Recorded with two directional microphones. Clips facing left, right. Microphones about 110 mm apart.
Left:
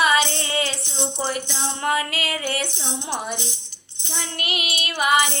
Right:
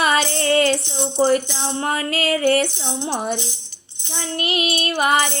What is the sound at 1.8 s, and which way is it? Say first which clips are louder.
Music: right 1 dB; 35° right (ahead or behind).